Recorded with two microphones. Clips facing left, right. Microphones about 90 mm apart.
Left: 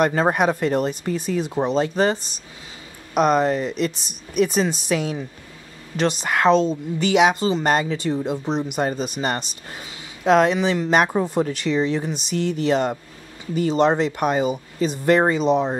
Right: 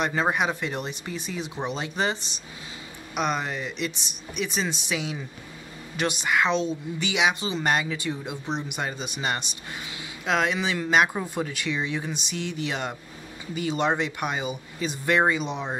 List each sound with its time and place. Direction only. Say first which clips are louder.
0.0 s a woman's voice: left 6 dB; 45° left (ahead or behind)